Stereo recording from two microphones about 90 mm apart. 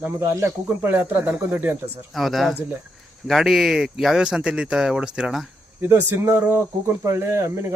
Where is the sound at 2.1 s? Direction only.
Centre (ahead or behind).